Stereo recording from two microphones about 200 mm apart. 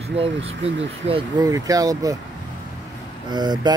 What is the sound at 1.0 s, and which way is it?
Speech, 25° right (ahead or behind).